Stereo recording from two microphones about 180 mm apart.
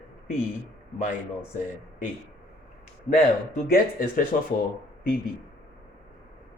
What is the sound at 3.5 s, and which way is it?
Speech, 50° left (ahead or behind).